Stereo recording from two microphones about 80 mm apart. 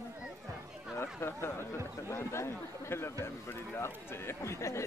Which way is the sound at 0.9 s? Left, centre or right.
Left.